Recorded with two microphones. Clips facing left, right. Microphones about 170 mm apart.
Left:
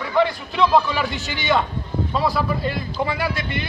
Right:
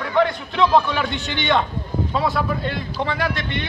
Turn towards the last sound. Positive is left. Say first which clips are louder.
# right 1 dB
turn(degrees=5)  # may be behind; listen again after turning